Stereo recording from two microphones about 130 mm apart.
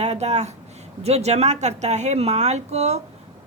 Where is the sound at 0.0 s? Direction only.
55° right (ahead or behind).